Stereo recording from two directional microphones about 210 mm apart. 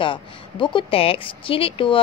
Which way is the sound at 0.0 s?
25° left (ahead or behind).